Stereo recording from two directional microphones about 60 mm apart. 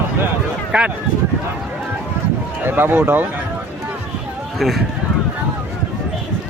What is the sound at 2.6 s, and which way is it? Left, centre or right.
Speech, right.